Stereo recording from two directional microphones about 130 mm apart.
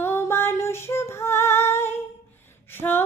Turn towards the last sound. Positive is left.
turn(degrees=15)  # may be behind; listen again after turning